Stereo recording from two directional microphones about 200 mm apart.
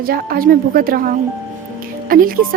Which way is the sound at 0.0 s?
50° right (ahead or behind).